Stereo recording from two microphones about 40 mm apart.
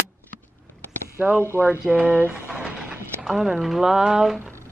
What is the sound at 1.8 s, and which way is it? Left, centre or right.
Speech, right.